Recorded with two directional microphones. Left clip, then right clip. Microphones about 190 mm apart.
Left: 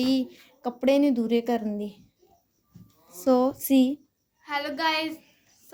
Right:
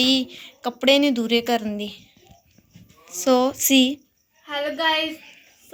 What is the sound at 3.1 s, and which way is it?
A woman's voice, 10° left (ahead or behind).